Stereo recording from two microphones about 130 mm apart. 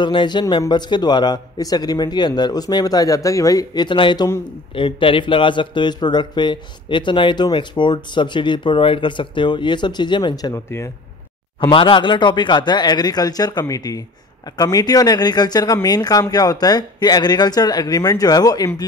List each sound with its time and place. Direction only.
0.0 s a man's voice: 35° left (ahead or behind); by 10.9 s 20° left (ahead or behind)
11.6 s a man's voice: 40° left (ahead or behind)